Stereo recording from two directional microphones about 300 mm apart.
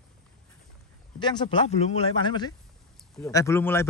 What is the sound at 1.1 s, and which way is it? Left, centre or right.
Speech, centre.